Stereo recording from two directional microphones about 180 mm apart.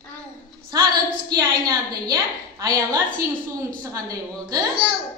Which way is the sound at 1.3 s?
20° right (ahead or behind).